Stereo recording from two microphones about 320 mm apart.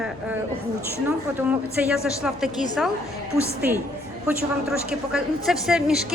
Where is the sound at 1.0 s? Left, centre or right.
Centre.